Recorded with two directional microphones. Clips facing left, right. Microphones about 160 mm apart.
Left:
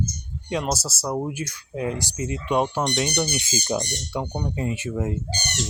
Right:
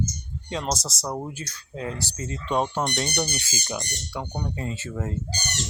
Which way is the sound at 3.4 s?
25° left (ahead or behind).